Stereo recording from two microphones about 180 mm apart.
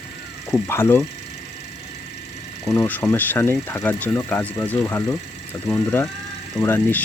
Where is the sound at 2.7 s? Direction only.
10° left (ahead or behind).